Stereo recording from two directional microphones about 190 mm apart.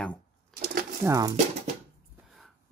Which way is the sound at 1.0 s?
20° right (ahead or behind).